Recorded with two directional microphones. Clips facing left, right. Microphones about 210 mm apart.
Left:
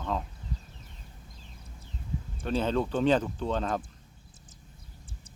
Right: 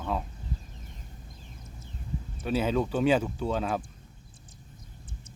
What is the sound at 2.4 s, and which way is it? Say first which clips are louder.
Speech: right 1 dB; 10° right (ahead or behind).